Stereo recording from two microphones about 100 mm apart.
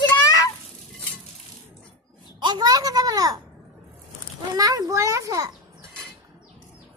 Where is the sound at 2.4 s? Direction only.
45° right (ahead or behind).